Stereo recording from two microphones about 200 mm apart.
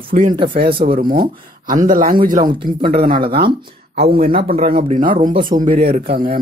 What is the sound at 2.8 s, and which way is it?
Speech, 45° right (ahead or behind).